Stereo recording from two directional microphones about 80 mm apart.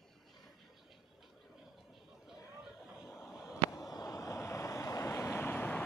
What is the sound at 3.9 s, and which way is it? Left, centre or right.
Vehicle, left.